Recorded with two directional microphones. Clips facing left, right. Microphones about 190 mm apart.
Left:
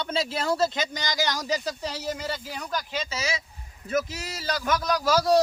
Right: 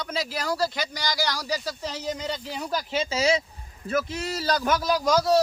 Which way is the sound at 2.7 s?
30° right (ahead or behind).